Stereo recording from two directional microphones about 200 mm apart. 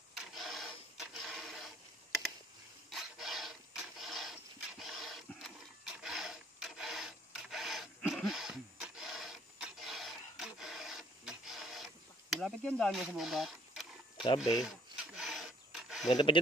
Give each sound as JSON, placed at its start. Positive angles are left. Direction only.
{"t": 0.1, "sound": "printer", "side_deg": 0}
{"t": 2.9, "sound": "printer", "side_deg": 0}
{"t": 14.4, "sound": "speech", "side_deg": 0}
{"t": 15.1, "sound": "filing", "side_deg": 0}
{"t": 16.1, "sound": "speech", "side_deg": 20}